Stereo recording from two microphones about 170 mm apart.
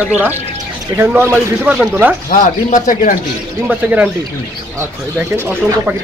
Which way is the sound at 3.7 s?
10° right (ahead or behind).